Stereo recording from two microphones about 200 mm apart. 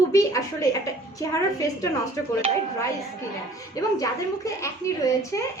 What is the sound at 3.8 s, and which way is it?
Speech, 15° left (ahead or behind).